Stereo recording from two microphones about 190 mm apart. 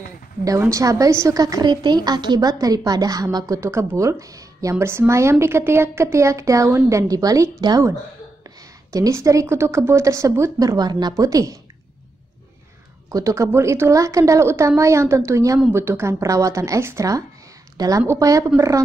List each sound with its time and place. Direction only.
0.5 s a woman's voice: 15° right (ahead or behind)
13.1 s a woman's voice: 15° right (ahead or behind)